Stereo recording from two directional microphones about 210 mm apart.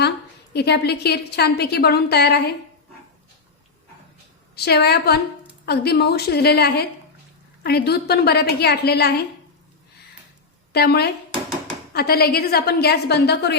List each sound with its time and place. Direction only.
0.5 s a woman's voice: 50° left (ahead or behind)
4.5 s a woman's voice: 50° left (ahead or behind)
10.7 s a woman's voice: 50° left (ahead or behind)